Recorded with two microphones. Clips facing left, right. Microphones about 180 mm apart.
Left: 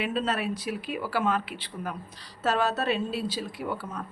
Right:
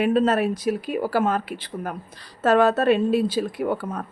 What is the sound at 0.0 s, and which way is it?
Speech, 50° right (ahead or behind).